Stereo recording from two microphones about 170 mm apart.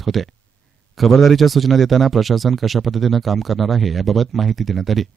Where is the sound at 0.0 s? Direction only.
Centre (ahead or behind).